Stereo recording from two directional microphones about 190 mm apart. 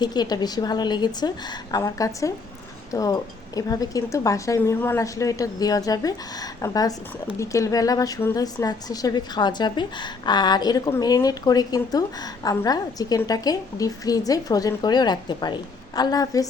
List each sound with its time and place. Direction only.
0.0 s a woman's voice: 20° left (ahead or behind)